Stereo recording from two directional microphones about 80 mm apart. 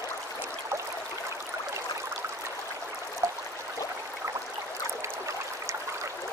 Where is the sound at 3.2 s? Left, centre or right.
Right.